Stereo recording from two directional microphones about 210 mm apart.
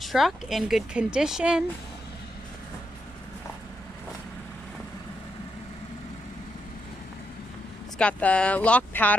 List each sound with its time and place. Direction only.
0.0 s speech: centre (ahead or behind)
8.0 s speech: 5° left (ahead or behind)